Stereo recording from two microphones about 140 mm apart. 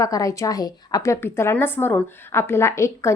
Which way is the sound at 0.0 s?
25° left (ahead or behind).